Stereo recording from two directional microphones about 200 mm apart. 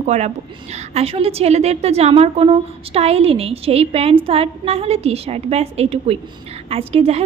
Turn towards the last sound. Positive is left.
turn(degrees=-30)  # may be behind; listen again after turning